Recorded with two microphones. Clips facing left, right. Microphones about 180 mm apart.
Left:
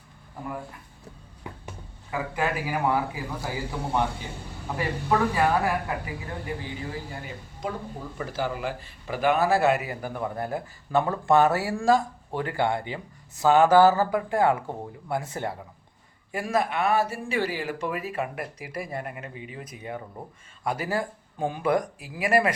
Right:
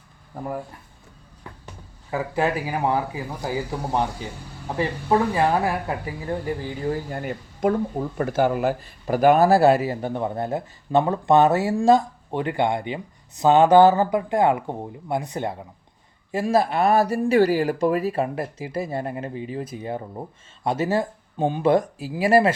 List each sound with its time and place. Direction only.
1.5 s a sound: 15° left (ahead or behind)
2.0 s speech: 30° right (ahead or behind)
7.1 s speech: 50° right (ahead or behind); by 22.5 s 30° right (ahead or behind)